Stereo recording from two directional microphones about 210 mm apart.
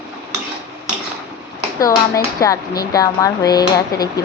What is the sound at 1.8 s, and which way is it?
Speech, 15° left (ahead or behind).